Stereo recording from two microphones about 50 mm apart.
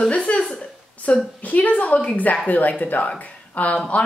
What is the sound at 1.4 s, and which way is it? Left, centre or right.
A woman's voice, left.